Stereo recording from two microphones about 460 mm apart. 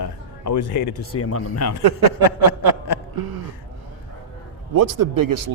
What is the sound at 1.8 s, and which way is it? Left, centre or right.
Speech, right.